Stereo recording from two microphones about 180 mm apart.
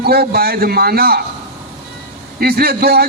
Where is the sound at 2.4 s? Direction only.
60° right (ahead or behind).